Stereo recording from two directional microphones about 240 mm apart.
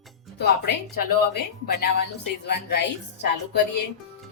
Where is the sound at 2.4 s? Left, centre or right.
Left.